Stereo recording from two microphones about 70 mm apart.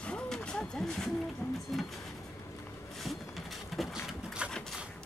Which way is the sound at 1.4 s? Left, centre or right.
Left.